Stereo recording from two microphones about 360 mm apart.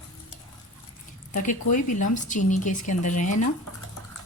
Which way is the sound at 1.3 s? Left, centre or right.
Left.